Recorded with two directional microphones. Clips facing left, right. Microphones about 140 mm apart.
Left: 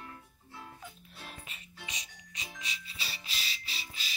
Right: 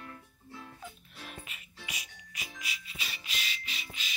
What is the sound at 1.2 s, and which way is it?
Music, 30° left (ahead or behind).